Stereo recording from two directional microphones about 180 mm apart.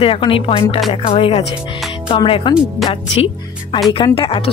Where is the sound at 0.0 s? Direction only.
30° left (ahead or behind).